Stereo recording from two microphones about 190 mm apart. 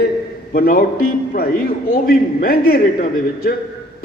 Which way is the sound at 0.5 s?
50° left (ahead or behind).